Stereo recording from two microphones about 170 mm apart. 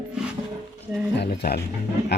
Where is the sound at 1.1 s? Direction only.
65° left (ahead or behind).